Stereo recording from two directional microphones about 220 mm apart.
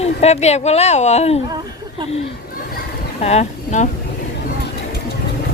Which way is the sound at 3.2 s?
30° left (ahead or behind).